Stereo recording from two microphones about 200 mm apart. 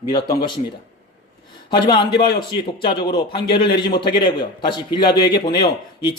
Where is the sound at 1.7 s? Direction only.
25° left (ahead or behind).